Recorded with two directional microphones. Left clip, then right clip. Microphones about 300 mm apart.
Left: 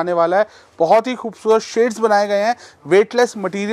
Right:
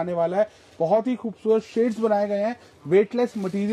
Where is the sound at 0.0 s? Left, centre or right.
Centre.